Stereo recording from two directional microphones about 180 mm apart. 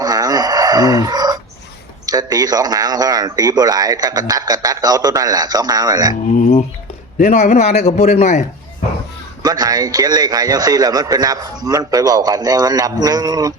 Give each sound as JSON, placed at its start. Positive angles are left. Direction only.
{"t": 0.0, "sound": "chicken", "side_deg": -20}
{"t": 2.0, "sound": "speech", "side_deg": -20}
{"t": 7.2, "sound": "a man's voice", "side_deg": 45}
{"t": 9.4, "sound": "speech", "side_deg": -20}